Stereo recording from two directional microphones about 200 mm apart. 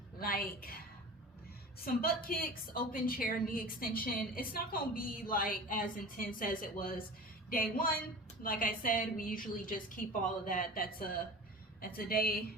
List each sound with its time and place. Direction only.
0.2 s a woman's voice: 45° left (ahead or behind)
1.8 s a woman's voice: 45° left (ahead or behind)